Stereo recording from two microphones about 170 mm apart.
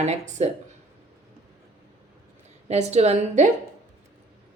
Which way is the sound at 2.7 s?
40° right (ahead or behind).